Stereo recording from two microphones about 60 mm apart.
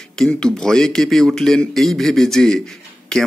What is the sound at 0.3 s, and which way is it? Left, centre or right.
Speech, centre.